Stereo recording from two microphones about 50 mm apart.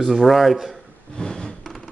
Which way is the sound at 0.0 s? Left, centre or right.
Centre.